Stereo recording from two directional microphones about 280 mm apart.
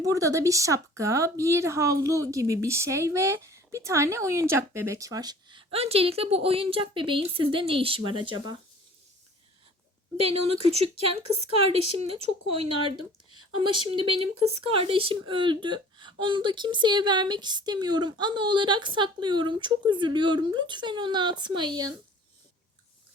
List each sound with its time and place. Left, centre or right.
0.0 s speech: centre
10.2 s speech: right